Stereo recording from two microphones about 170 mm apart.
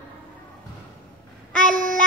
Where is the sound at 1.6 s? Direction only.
50° right (ahead or behind).